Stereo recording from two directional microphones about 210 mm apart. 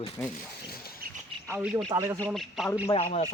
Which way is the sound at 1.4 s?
10° right (ahead or behind).